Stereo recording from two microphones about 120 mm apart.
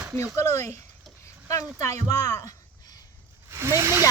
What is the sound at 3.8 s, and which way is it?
Speech, 20° right (ahead or behind).